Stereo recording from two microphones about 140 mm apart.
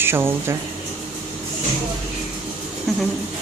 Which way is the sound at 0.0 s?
15° right (ahead or behind).